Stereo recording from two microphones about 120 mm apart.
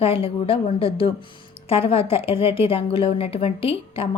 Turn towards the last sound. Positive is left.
turn(degrees=50)  # may be behind; listen again after turning